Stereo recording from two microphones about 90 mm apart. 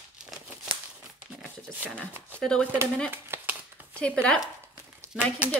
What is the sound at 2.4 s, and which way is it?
Speech, 10° left (ahead or behind).